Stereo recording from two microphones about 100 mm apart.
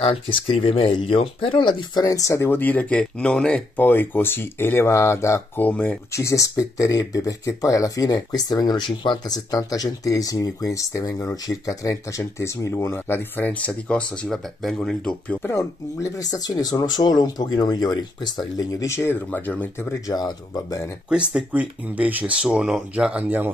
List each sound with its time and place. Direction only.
0.0 s speech: 65° left (ahead or behind)
2.0 s speech: 35° left (ahead or behind)
5.6 s speech: 15° left (ahead or behind)
6.1 s speech: 30° left (ahead or behind); by 15.5 s 10° left (ahead or behind)
15.5 s speech: 35° left (ahead or behind); by 19.9 s 20° left (ahead or behind)
19.9 s speech: 40° left (ahead or behind)
21.1 s speech: 10° right (ahead or behind)
23.2 s speech: 20° right (ahead or behind)